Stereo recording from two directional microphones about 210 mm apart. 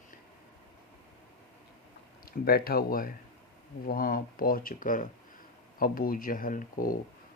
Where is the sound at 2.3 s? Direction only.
45° left (ahead or behind).